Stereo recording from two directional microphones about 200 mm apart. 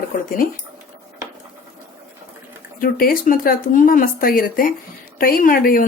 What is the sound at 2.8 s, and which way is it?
Speech, 45° left (ahead or behind).